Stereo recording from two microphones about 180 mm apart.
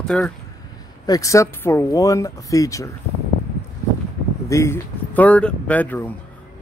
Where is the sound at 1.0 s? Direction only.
20° left (ahead or behind).